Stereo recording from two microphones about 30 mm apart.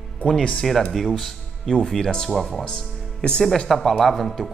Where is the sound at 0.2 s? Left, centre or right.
Left.